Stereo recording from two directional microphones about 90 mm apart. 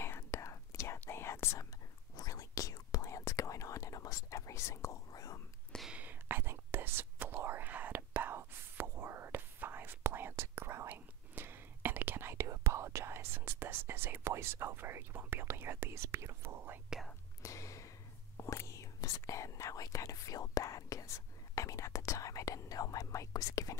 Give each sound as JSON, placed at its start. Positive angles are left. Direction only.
{"t": 0.0, "sound": "whispering", "side_deg": 30}
{"t": 2.1, "sound": "whispering", "side_deg": 40}
{"t": 5.9, "sound": "whispering", "side_deg": -15}
{"t": 17.4, "sound": "a sound", "side_deg": 35}
{"t": 18.4, "sound": "whispering", "side_deg": 35}